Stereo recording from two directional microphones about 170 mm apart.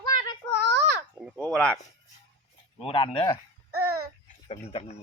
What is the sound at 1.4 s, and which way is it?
Speech, 5° left (ahead or behind).